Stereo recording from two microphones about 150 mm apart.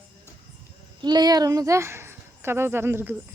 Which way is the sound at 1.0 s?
30° right (ahead or behind).